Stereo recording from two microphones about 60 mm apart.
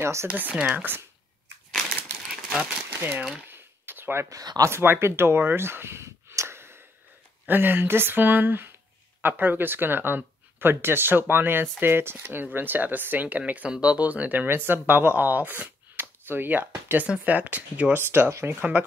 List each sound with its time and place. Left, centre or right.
0.0 s speech: right
0.3 s speech: right
2.4 s a sound: centre
2.9 s speech: right
3.4 s a sound: right
4.3 s speech: right
4.6 s speech: right
6.3 s a sound: right
7.4 s speech: right
17.0 s speech: right
18.3 s speech: right
18.6 s speech: right